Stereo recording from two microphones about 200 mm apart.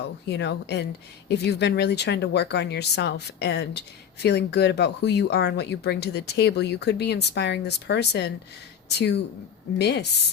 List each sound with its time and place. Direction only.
0.3 s speech: 55° left (ahead or behind)